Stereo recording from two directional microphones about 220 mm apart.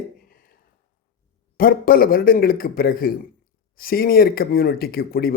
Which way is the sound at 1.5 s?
40° left (ahead or behind).